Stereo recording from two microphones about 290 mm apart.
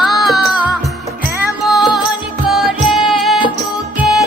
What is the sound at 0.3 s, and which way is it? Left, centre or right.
Music, centre.